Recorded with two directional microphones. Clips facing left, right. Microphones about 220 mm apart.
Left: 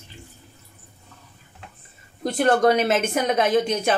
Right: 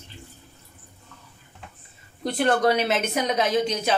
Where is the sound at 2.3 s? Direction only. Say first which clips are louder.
Left 3 dB; 45° left (ahead or behind).